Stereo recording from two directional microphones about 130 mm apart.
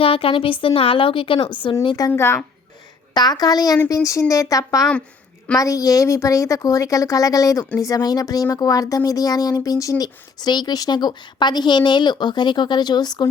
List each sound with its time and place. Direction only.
0.0 s a woman's voice: 45° left (ahead or behind)
2.0 s speech: 20° left (ahead or behind)
3.2 s speech: 30° left (ahead or behind)